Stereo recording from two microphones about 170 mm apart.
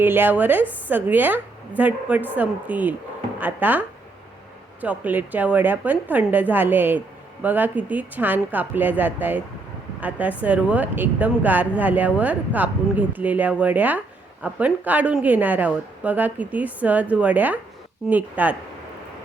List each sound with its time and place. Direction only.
0.0 s a woman's voice: 10° right (ahead or behind)